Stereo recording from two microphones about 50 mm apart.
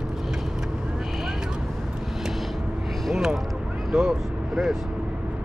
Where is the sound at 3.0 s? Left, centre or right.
Centre.